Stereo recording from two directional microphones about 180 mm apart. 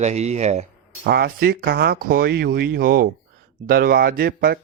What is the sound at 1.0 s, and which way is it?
Speech, 65° right (ahead or behind).